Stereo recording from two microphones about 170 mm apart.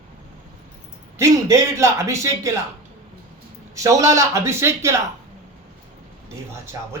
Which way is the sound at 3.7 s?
20° right (ahead or behind).